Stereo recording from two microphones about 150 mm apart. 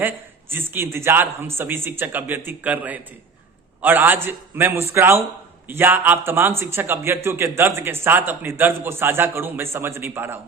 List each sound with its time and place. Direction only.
0.5 s a man's voice: 15° right (ahead or behind)